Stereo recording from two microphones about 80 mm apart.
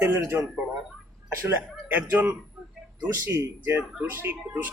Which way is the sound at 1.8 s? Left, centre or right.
Right.